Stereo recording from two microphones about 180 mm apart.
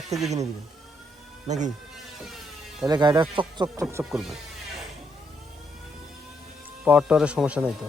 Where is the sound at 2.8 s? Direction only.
25° right (ahead or behind).